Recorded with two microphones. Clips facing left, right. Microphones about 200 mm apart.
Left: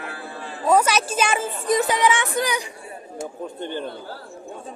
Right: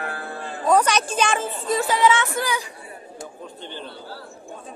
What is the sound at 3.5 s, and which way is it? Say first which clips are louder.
Speech: left 8 dB; 50° left (ahead or behind).